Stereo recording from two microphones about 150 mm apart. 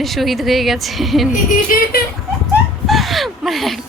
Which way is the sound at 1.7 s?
70° left (ahead or behind).